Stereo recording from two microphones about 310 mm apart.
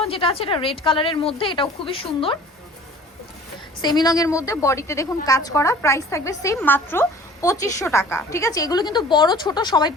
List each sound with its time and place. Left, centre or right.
0.0 s a woman's voice: centre
3.8 s a woman's voice: centre